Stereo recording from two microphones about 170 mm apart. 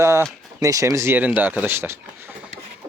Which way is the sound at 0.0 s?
15° right (ahead or behind).